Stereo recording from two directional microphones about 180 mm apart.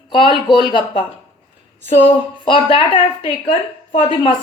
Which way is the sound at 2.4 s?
30° left (ahead or behind).